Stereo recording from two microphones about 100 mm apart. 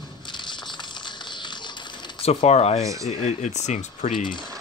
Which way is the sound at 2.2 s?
90° left.